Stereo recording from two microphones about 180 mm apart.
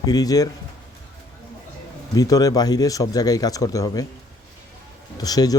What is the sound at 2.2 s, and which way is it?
Speech, 20° left (ahead or behind).